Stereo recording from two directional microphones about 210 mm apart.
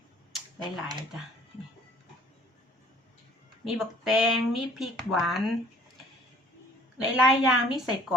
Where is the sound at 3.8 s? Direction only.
Centre (ahead or behind).